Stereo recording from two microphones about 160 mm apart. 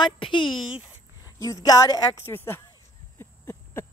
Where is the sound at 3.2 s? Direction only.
15° left (ahead or behind).